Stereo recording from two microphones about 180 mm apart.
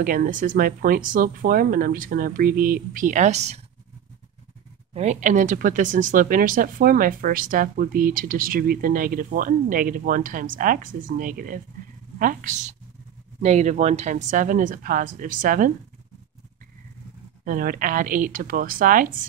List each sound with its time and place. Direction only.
0.0 s speech: 50° right (ahead or behind)
4.9 s speech: 40° right (ahead or behind)
17.5 s speech: 50° right (ahead or behind)